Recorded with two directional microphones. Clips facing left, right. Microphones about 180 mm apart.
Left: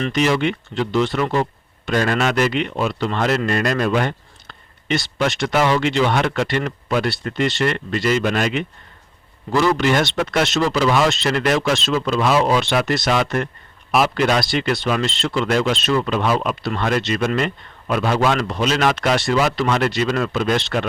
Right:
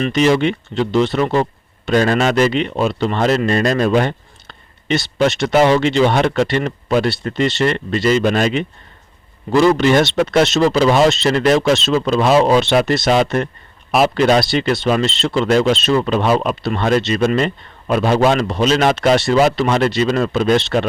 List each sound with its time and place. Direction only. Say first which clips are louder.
0.1 s a man's voice: right 5 dB; 25° right (ahead or behind)